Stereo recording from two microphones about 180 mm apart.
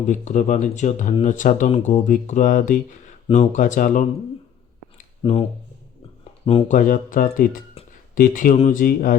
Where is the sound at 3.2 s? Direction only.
35° left (ahead or behind).